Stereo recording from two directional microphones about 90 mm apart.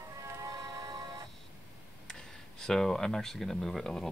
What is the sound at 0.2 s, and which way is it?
Music, 35° right (ahead or behind).